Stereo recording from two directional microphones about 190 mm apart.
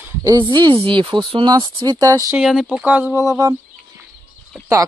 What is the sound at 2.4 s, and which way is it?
Speech, centre (ahead or behind).